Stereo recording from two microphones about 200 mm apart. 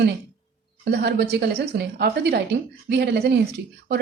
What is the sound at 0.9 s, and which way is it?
A woman's voice, 55° right (ahead or behind).